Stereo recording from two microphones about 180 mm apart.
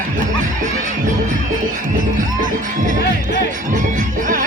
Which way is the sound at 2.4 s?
45° right (ahead or behind).